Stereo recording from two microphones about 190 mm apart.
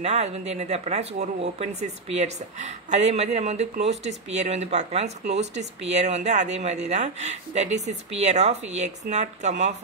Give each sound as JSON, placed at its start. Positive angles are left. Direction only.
{"t": 0.0, "sound": "speech", "side_deg": -35}